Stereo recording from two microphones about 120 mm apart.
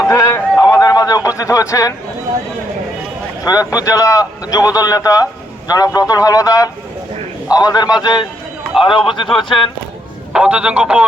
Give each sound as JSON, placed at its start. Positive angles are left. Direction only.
{"t": 0.1, "sound": "speech", "side_deg": 25}
{"t": 0.7, "sound": "a sound", "side_deg": 30}
{"t": 1.4, "sound": "speech", "side_deg": 25}
{"t": 3.4, "sound": "a man's voice", "side_deg": 30}
{"t": 10.3, "sound": "speech", "side_deg": -10}